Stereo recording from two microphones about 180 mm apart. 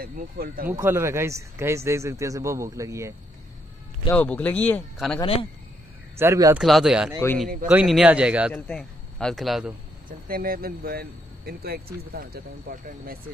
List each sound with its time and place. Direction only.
0.0 s speech: 55° right (ahead or behind)
0.7 s speech: 15° right (ahead or behind)
4.1 s speech: 10° left (ahead or behind)
5.2 s speech: 30° left (ahead or behind)
6.1 s speech: 15° right (ahead or behind)
6.6 s speech: centre (ahead or behind)
8.5 s a man's voice: 5° left (ahead or behind)
10.0 s speech: 55° right (ahead or behind)